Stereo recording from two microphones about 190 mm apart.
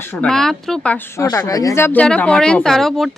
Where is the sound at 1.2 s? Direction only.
15° left (ahead or behind).